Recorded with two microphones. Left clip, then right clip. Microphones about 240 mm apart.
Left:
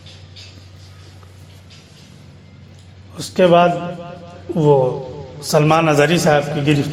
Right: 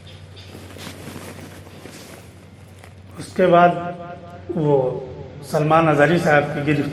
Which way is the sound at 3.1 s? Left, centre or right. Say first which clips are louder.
Left 3 dB; left.